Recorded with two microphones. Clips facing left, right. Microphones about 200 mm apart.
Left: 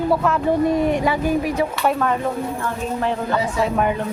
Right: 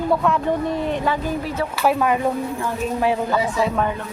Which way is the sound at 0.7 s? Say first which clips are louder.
Left 4 dB; 15° left (ahead or behind).